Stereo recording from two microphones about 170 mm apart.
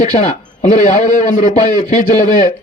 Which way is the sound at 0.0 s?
45° left (ahead or behind).